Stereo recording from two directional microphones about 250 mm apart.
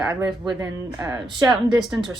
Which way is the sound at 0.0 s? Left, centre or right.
Centre.